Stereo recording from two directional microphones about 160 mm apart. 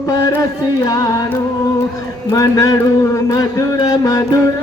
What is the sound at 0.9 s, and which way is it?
Music, 20° left (ahead or behind).